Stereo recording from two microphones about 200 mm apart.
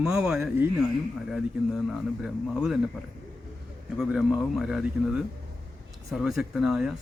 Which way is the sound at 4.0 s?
Centre (ahead or behind).